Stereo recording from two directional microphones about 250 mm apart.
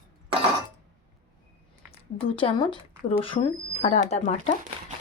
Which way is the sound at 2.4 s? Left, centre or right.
Centre.